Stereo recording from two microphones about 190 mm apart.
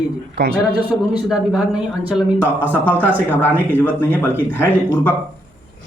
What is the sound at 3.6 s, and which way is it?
Speech, 10° left (ahead or behind).